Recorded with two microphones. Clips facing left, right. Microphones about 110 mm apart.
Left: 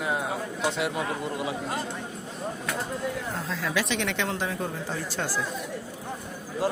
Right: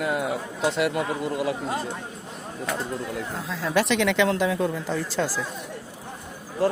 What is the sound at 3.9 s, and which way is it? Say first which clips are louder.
Speech: right 7 dB; 90° right.